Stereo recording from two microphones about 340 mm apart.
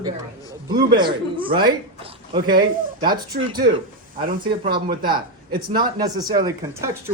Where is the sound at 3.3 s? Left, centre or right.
Right.